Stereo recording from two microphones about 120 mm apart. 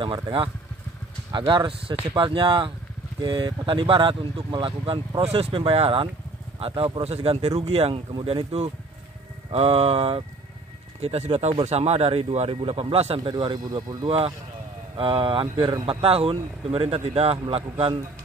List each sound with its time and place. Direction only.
0.0 s speech: 45° right (ahead or behind)
1.5 s speech: 45° right (ahead or behind)
13.3 s speech: 35° right (ahead or behind)